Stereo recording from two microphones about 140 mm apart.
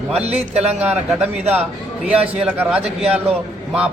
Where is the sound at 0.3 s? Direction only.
50° right (ahead or behind).